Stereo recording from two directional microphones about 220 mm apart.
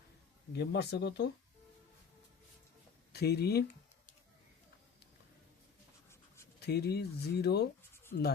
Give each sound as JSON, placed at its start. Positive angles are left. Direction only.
{"t": 0.5, "sound": "speech", "side_deg": 50}
{"t": 3.1, "sound": "speech", "side_deg": 45}
{"t": 6.1, "sound": "scratch", "side_deg": 10}
{"t": 6.6, "sound": "speech", "side_deg": 45}